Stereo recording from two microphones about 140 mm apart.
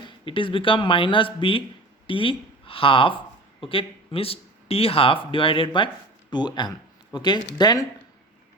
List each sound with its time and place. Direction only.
0.3 s speech: 40° left (ahead or behind)